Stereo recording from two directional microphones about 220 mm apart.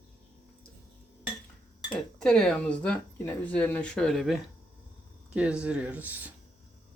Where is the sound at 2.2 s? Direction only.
Centre (ahead or behind).